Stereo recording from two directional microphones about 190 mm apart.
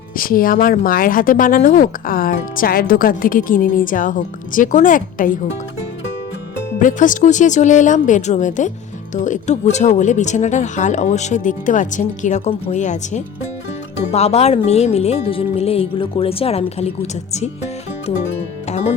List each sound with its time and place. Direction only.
0.2 s a woman's voice: 50° left (ahead or behind)
6.7 s speech: 45° left (ahead or behind)
18.7 s music: 35° left (ahead or behind)